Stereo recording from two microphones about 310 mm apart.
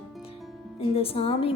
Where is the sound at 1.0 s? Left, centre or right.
Centre.